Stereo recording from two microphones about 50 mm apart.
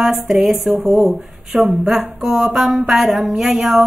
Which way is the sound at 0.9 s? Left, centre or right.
Centre.